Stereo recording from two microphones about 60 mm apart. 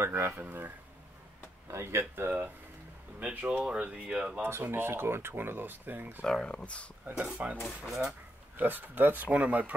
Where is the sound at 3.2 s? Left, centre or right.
Right.